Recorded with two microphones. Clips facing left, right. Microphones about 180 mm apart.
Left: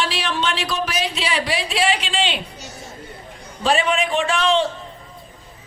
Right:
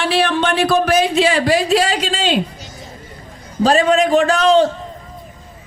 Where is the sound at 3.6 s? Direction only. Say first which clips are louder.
Right 7 dB; 40° right (ahead or behind).